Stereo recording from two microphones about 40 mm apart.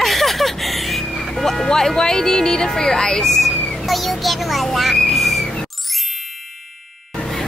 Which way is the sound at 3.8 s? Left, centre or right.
Centre.